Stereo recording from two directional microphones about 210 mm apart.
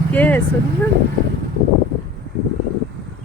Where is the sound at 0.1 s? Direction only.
10° left (ahead or behind).